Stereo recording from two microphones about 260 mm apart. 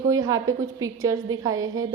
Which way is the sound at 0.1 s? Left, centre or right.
Centre.